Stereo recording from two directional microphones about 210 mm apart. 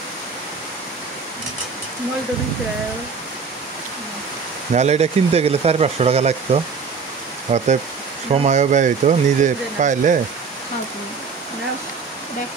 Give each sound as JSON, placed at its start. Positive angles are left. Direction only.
{"t": 4.7, "sound": "speech", "side_deg": -30}